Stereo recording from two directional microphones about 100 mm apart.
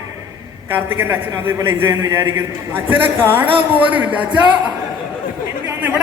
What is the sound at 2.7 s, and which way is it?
Speech, 20° right (ahead or behind).